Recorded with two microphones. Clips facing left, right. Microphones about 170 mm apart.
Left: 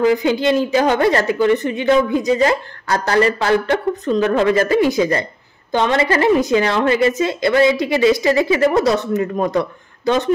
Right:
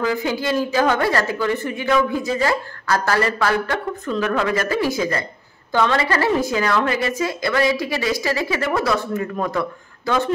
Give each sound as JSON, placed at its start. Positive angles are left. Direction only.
{"t": 0.0, "sound": "speech", "side_deg": 20}